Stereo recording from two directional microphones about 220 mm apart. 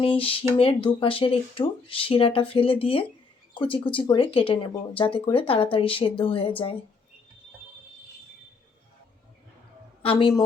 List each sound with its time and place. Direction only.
0.0 s speech: 25° left (ahead or behind)
10.0 s speech: 25° left (ahead or behind)